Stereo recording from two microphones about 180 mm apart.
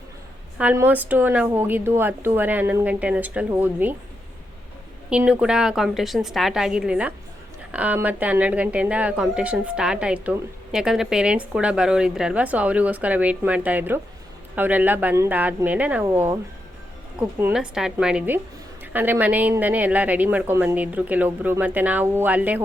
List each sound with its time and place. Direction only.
0.6 s a woman's voice: 10° right (ahead or behind)
5.0 s a woman's voice: 5° right (ahead or behind)
17.2 s a woman's voice: 5° right (ahead or behind)